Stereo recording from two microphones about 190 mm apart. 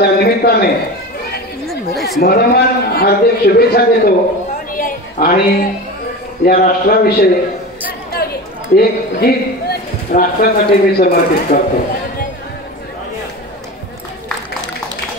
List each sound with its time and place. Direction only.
0.0 s a sound: 55° left (ahead or behind)
1.7 s chatter: centre (ahead or behind)
2.2 s speech: 55° left (ahead or behind)
4.7 s a sound: 45° left (ahead or behind)
6.4 s speech: 50° left (ahead or behind)
8.7 s speech: 55° left (ahead or behind)